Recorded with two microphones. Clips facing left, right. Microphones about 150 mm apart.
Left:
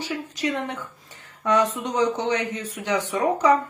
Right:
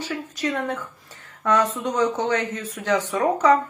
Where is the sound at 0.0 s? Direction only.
15° left (ahead or behind).